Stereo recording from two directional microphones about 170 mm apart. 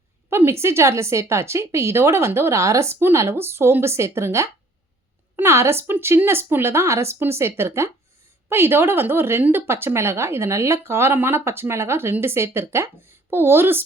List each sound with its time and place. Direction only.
0.3 s a woman's voice: 15° right (ahead or behind)